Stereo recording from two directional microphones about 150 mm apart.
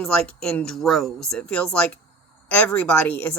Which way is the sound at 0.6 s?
Centre (ahead or behind).